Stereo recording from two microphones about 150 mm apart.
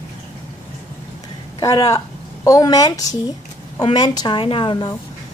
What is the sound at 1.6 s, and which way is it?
A woman's voice, 25° left (ahead or behind).